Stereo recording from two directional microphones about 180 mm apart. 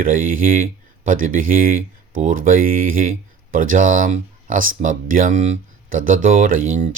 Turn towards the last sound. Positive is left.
turn(degrees=-50)  # may be behind; listen again after turning